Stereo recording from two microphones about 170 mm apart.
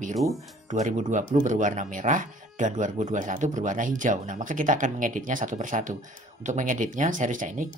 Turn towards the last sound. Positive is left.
turn(degrees=-50)  # may be behind; listen again after turning